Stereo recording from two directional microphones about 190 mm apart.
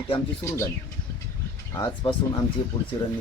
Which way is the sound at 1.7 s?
25° left (ahead or behind).